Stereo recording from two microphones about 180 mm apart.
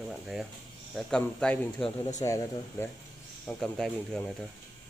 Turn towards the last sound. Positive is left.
turn(degrees=5)  # may be behind; listen again after turning